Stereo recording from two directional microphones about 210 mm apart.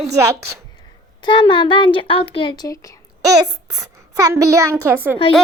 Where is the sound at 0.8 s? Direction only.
20° left (ahead or behind).